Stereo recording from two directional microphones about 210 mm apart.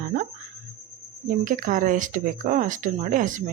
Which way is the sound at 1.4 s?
40° right (ahead or behind).